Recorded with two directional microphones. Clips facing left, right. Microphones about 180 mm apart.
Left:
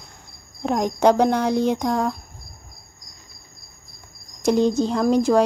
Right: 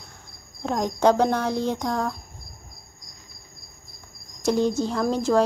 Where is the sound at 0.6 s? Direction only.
15° left (ahead or behind).